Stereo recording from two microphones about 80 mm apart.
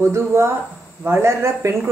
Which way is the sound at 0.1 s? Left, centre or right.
Right.